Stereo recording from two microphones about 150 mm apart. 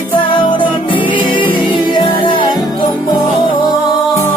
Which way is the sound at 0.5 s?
35° left (ahead or behind).